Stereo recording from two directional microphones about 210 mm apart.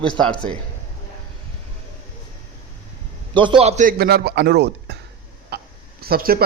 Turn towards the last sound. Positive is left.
turn(degrees=-45)  # may be behind; listen again after turning